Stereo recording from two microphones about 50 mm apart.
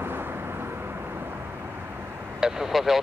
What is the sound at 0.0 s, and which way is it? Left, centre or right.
Vehicle, right.